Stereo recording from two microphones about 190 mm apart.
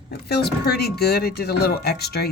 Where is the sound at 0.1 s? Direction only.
55° left (ahead or behind).